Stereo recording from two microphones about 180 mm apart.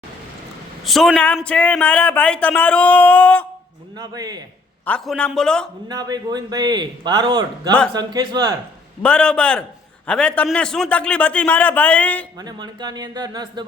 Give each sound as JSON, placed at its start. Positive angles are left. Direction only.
{"t": 0.9, "sound": "a man's voice", "side_deg": 0}
{"t": 3.9, "sound": "a man's voice", "side_deg": -20}
{"t": 4.9, "sound": "a man's voice", "side_deg": 5}
{"t": 5.9, "sound": "a man's voice", "side_deg": -20}
{"t": 9.0, "sound": "a man's voice", "side_deg": 5}
{"t": 12.4, "sound": "a man's voice", "side_deg": -20}